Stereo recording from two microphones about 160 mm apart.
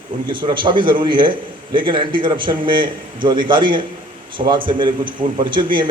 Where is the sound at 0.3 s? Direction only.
30° right (ahead or behind).